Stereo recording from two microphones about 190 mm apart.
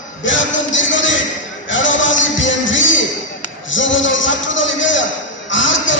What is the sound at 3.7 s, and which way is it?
A man's voice, 80° left.